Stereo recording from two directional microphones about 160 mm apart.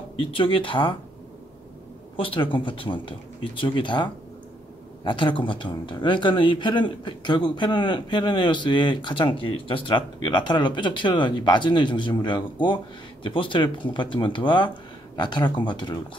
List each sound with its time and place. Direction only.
0.1 s speech: 35° left (ahead or behind)
2.1 s speech: 35° left (ahead or behind)